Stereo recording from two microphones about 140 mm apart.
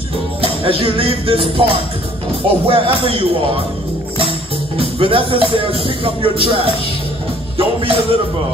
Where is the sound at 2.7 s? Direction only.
40° right (ahead or behind).